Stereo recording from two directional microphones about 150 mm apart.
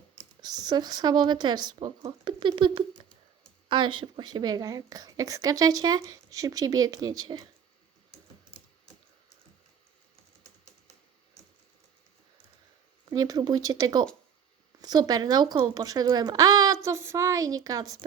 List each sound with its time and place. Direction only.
0.4 s speech: 25° right (ahead or behind)
13.1 s speech: 25° right (ahead or behind)